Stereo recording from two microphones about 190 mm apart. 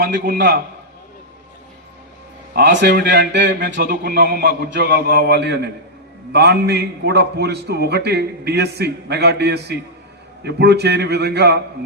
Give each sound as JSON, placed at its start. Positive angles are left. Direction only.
{"t": 0.0, "sound": "a man's voice", "side_deg": -55}
{"t": 2.5, "sound": "a man's voice", "side_deg": -60}